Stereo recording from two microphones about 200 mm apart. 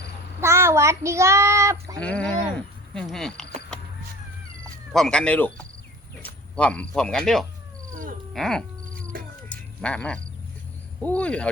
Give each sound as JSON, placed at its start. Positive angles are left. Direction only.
{"t": 0.4, "sound": "a child's voice", "side_deg": -15}
{"t": 2.0, "sound": "speech", "side_deg": 5}
{"t": 4.9, "sound": "speech", "side_deg": 0}
{"t": 9.1, "sound": "a sound", "side_deg": -45}
{"t": 9.5, "sound": "a sound", "side_deg": 5}
{"t": 11.0, "sound": "speech", "side_deg": 5}